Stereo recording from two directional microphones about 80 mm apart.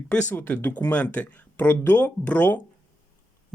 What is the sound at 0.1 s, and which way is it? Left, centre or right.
Speech, left.